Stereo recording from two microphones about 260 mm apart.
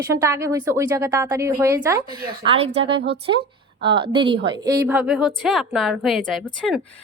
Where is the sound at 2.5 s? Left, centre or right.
Right.